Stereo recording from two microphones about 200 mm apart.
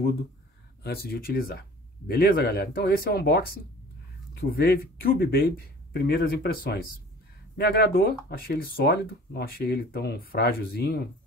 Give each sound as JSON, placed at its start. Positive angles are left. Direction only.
{"t": 0.8, "sound": "speech", "side_deg": 50}